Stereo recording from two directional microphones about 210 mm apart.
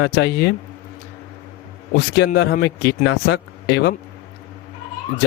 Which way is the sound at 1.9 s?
50° left (ahead or behind).